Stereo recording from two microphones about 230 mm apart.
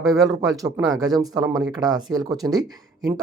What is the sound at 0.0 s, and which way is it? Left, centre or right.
Speech, centre.